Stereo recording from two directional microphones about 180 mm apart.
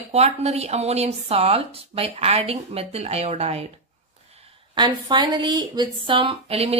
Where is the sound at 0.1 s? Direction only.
35° right (ahead or behind).